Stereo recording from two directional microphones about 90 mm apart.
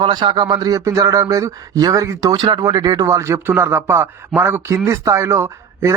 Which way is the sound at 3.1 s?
35° right (ahead or behind).